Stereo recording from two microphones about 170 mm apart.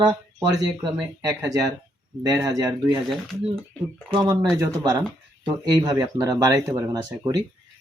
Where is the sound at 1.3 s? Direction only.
20° right (ahead or behind).